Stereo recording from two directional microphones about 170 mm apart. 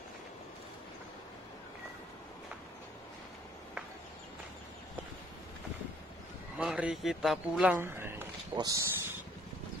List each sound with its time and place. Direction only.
6.6 s speech: 5° right (ahead or behind)
7.7 s a sound: 15° right (ahead or behind)
8.5 s speech: 20° right (ahead or behind)